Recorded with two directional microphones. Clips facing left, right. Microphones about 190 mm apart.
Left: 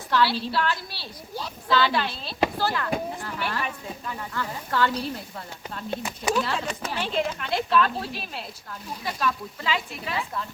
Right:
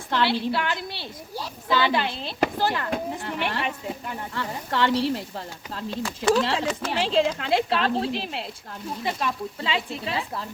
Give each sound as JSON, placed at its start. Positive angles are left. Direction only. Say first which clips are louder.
{"t": 0.1, "sound": "speech", "louder": "even", "side_deg": -20}
{"t": 4.9, "sound": "a woman's voice", "louder": "right 6 dB", "side_deg": -80}
{"t": 6.0, "sound": "speech", "louder": "right 8 dB", "side_deg": 15}
{"t": 6.4, "sound": "speech", "louder": "right 4 dB", "side_deg": -90}
{"t": 7.8, "sound": "speech", "louder": "right 1 dB", "side_deg": -30}